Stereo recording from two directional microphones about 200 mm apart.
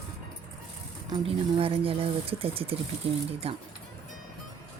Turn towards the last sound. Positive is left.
turn(degrees=-30)  # may be behind; listen again after turning